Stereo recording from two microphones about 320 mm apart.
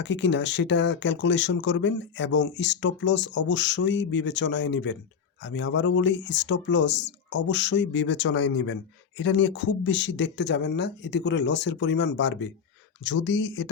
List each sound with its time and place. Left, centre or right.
0.0 s speech: left